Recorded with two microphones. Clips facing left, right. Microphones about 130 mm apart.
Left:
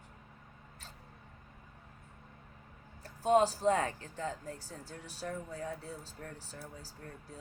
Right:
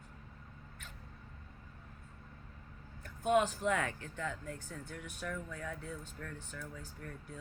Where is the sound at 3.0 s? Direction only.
35° left (ahead or behind).